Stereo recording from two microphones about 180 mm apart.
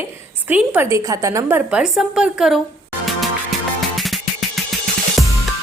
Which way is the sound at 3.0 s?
Centre (ahead or behind).